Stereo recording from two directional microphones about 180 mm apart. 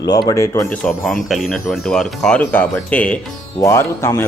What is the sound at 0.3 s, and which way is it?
Speech, 15° left (ahead or behind).